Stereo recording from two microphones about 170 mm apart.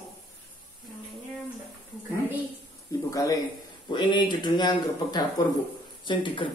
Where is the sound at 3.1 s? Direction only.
20° left (ahead or behind).